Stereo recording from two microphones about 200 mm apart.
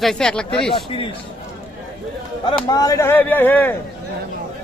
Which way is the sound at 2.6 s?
20° left (ahead or behind).